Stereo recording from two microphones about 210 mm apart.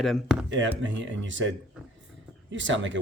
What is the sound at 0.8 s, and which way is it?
Speech, 60° right (ahead or behind).